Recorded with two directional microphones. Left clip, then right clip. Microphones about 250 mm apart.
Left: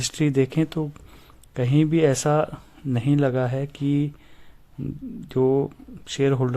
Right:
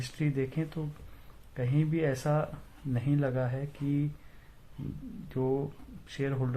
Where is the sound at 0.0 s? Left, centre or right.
Left.